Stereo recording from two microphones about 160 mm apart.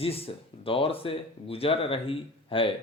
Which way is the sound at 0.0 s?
35° left (ahead or behind).